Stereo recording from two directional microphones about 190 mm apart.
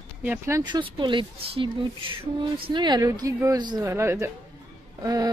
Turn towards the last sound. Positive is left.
turn(degrees=-20)  # may be behind; listen again after turning